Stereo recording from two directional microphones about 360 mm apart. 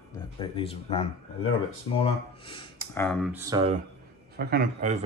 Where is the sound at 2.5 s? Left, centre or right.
Centre.